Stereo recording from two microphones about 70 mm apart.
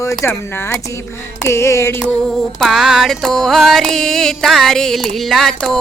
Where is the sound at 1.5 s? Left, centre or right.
Left.